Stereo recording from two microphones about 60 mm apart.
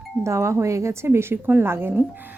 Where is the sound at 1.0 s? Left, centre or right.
Right.